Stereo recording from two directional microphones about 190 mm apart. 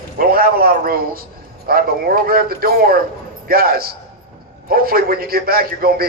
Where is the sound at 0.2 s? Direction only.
50° right (ahead or behind).